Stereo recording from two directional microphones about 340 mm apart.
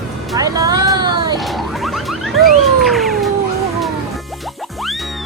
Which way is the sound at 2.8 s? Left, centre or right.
Centre.